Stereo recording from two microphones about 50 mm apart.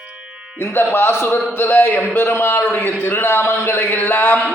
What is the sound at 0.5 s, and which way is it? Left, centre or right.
Speech, left.